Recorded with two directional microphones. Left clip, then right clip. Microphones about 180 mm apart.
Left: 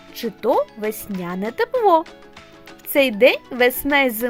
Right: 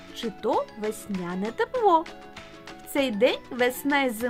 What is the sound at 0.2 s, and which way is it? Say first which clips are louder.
Speech: left 7 dB; 30° left (ahead or behind).